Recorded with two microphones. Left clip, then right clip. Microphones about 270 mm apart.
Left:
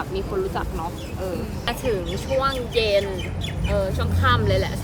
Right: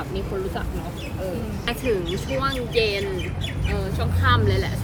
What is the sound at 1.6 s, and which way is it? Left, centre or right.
Speech, centre.